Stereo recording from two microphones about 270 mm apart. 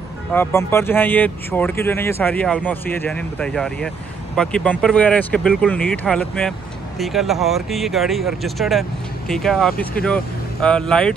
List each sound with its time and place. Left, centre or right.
0.3 s speech: centre